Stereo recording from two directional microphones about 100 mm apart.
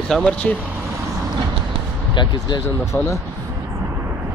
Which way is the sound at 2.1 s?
50° left (ahead or behind).